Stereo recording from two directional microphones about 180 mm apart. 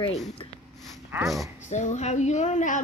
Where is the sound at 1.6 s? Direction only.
40° left (ahead or behind).